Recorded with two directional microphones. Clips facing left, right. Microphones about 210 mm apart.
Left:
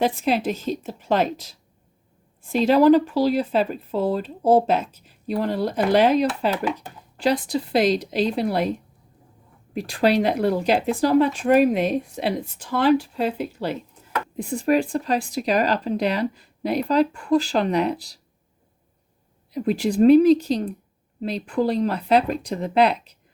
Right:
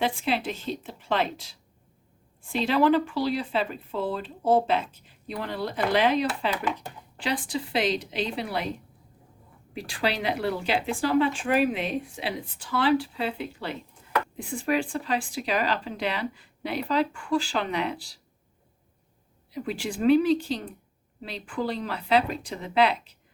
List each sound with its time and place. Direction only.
0.0 s speech: 45° left (ahead or behind)
9.7 s speech: 45° left (ahead or behind)
19.5 s speech: 40° left (ahead or behind)